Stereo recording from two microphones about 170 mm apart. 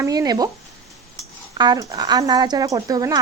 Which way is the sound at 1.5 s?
25° right (ahead or behind).